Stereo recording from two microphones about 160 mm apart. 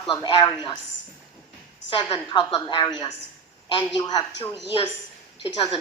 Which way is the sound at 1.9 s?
25° left (ahead or behind).